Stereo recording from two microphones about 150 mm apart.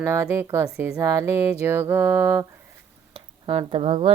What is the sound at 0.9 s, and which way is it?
Speech, 20° right (ahead or behind).